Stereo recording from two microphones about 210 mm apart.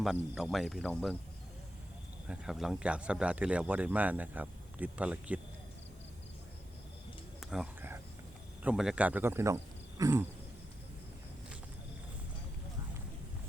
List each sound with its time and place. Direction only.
0.0 s speech: centre (ahead or behind)
2.2 s speech: 5° right (ahead or behind)
7.5 s a sound: 5° right (ahead or behind)
8.6 s speech: centre (ahead or behind)